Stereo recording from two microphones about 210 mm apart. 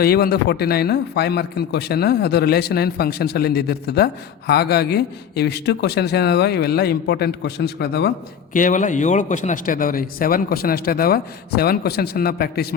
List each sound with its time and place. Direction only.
0.0 s a man's voice: 50° left (ahead or behind)
8.5 s a man's voice: 40° left (ahead or behind)